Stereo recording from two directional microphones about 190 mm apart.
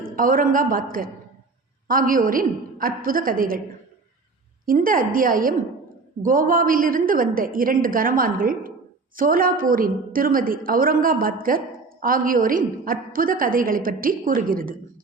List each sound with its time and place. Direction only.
0.2 s a woman's voice: 45° right (ahead or behind)
4.6 s a woman's voice: 50° right (ahead or behind)